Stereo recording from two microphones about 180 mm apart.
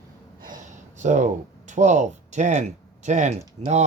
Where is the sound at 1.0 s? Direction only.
40° right (ahead or behind).